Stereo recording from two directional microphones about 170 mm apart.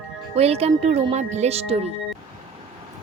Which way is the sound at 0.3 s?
35° right (ahead or behind).